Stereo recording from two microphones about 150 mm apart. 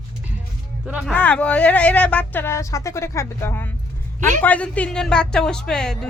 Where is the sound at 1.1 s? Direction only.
10° left (ahead or behind).